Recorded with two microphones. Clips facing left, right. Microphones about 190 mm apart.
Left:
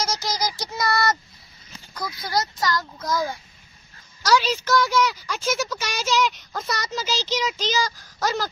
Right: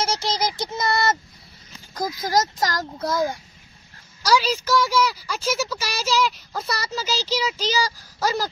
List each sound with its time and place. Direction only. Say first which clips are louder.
0.0 s child singing: right 2 dB; 30° right (ahead or behind)
2.0 s speech: right 4 dB; 45° right (ahead or behind)
4.2 s a woman's voice: even; 10° right (ahead or behind)